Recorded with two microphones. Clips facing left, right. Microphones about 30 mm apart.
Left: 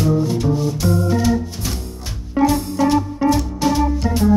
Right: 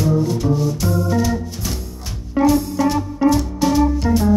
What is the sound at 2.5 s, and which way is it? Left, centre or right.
Music, centre.